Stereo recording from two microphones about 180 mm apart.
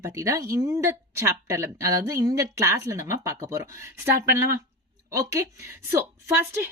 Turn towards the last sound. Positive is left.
turn(degrees=-15)  # may be behind; listen again after turning